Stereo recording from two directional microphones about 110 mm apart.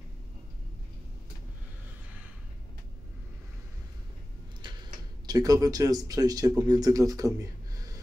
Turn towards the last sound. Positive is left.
turn(degrees=-30)  # may be behind; listen again after turning